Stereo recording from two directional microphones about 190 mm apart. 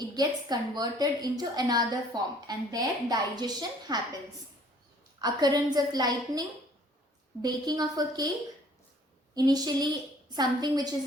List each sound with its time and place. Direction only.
0.2 s a woman's voice: 20° right (ahead or behind)
5.2 s a woman's voice: 20° right (ahead or behind)
7.4 s a woman's voice: 20° right (ahead or behind)
9.3 s a woman's voice: 20° right (ahead or behind)